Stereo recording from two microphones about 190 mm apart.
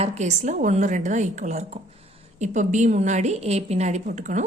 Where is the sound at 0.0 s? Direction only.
35° right (ahead or behind).